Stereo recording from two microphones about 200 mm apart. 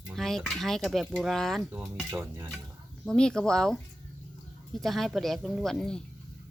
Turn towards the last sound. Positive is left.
turn(degrees=5)  # may be behind; listen again after turning